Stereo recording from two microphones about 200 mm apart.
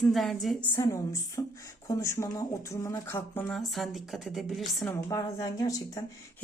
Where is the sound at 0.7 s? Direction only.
15° left (ahead or behind).